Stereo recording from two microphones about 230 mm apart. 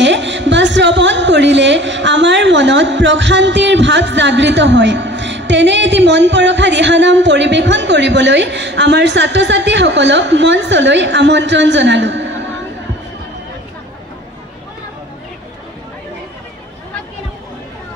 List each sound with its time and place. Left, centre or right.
0.0 s speech: right